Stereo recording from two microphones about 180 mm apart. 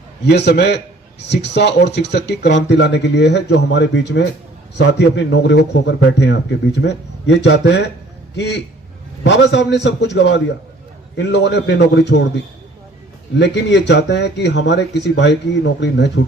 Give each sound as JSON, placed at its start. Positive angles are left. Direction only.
{"t": 0.3, "sound": "speech", "side_deg": 70}
{"t": 13.4, "sound": "speech", "side_deg": 75}